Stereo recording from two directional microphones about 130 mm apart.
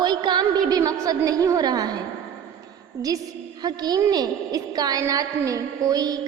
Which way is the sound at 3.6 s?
30° right (ahead or behind).